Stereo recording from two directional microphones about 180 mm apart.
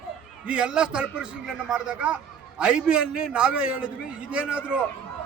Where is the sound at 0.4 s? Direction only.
5° right (ahead or behind).